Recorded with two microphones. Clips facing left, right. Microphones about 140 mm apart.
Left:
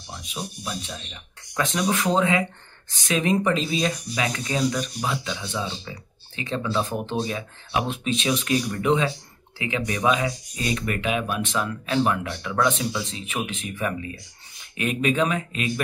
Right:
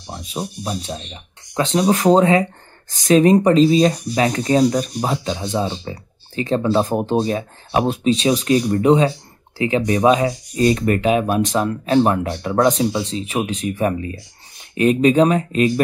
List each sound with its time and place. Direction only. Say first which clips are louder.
0.0 s speech: right 7 dB; 40° right (ahead or behind)